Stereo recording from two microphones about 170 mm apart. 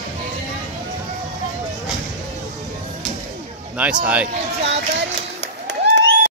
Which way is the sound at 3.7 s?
10° right (ahead or behind).